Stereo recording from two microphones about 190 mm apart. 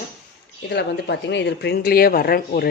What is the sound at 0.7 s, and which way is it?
Speech, 65° left (ahead or behind).